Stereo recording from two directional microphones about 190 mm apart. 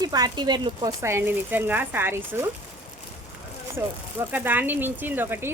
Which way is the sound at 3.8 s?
15° right (ahead or behind).